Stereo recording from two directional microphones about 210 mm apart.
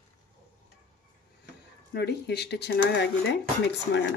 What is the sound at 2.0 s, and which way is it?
Speech, 50° left (ahead or behind).